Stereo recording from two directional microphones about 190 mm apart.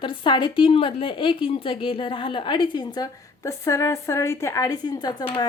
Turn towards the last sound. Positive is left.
turn(degrees=25)  # may be behind; listen again after turning